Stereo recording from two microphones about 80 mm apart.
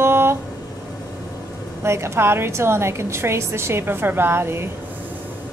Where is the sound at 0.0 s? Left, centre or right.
Right.